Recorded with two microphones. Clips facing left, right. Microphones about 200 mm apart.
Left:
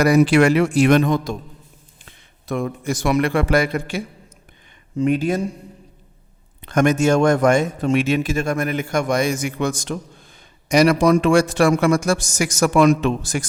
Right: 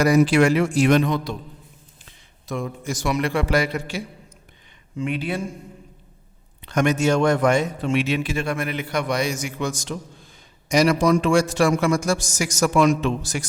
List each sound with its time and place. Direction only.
0.0 s a man's voice: 65° left (ahead or behind); by 1.4 s 45° left (ahead or behind)
2.0 s a man's voice: 60° left (ahead or behind)
4.9 s a man's voice: 45° left (ahead or behind)
6.7 s a man's voice: 50° left (ahead or behind)